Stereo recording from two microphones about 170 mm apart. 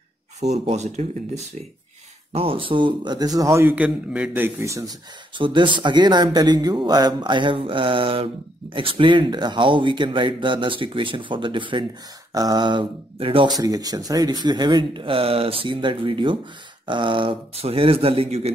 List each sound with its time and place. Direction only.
0.4 s speech: 40° right (ahead or behind); by 4.9 s 15° right (ahead or behind)
5.4 s speech: 30° right (ahead or behind)